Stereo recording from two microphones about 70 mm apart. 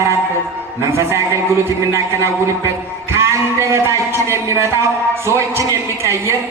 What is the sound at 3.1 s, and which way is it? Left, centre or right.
Speech, right.